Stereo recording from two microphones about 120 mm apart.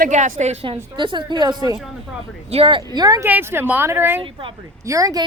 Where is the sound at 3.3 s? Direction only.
15° right (ahead or behind).